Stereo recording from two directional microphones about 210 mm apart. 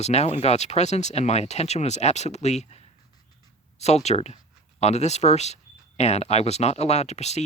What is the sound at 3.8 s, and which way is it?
Speech, 30° left (ahead or behind).